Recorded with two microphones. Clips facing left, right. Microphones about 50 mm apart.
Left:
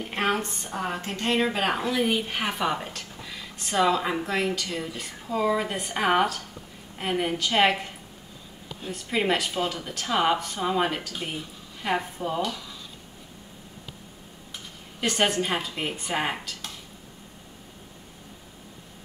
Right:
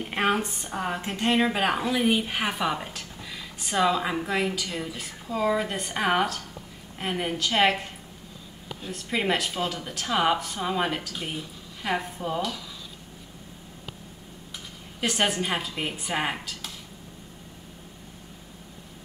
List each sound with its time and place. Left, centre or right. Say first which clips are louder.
0.0 s a woman's voice: right 1 dB; centre
8.8 s a woman's voice: left 1 dB; centre
15.0 s a woman's voice: left 1 dB; centre